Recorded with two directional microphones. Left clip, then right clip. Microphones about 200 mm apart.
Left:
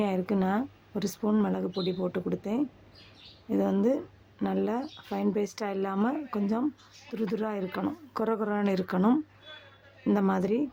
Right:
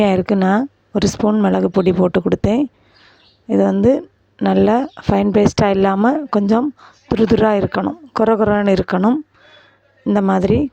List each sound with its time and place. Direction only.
0.0 s speech: 45° right (ahead or behind)
9.0 s speech: 30° right (ahead or behind)
10.1 s speech: 45° right (ahead or behind)